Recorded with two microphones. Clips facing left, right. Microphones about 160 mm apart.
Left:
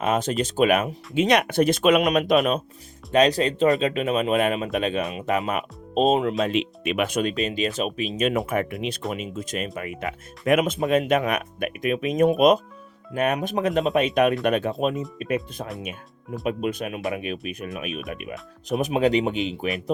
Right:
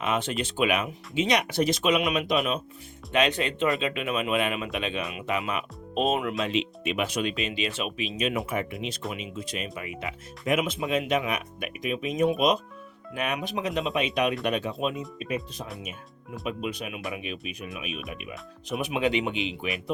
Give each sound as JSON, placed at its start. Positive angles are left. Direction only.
{"t": 0.0, "sound": "speech", "side_deg": 45}
{"t": 3.1, "sound": "speech", "side_deg": 35}
{"t": 6.4, "sound": "speech", "side_deg": 55}
{"t": 16.5, "sound": "speech", "side_deg": 50}
{"t": 18.7, "sound": "speech", "side_deg": 40}